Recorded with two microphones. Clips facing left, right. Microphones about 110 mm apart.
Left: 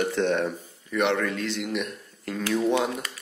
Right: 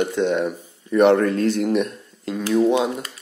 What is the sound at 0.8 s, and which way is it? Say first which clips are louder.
A man's voice: right 9 dB; 40° right (ahead or behind).